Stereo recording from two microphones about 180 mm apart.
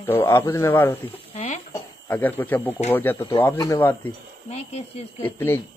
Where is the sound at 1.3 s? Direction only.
40° left (ahead or behind).